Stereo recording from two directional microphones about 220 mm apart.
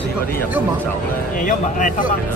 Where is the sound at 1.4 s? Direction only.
35° left (ahead or behind).